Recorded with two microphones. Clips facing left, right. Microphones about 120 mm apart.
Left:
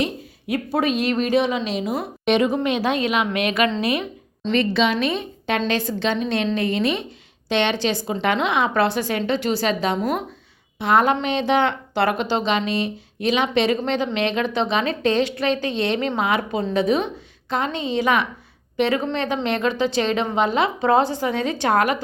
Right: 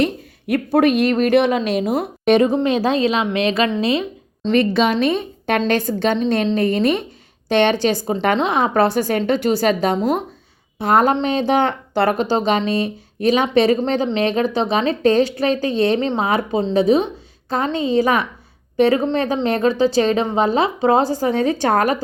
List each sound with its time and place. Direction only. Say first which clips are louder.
0.0 s speech: right 5 dB; 55° right (ahead or behind)
2.5 s a woman's voice: right 4 dB; 30° right (ahead or behind)
4.5 s a woman's voice: right 3 dB; 45° right (ahead or behind)